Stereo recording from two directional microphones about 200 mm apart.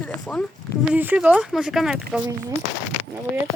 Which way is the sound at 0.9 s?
10° right (ahead or behind).